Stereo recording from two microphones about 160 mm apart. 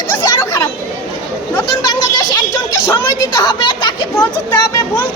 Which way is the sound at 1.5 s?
25° left (ahead or behind).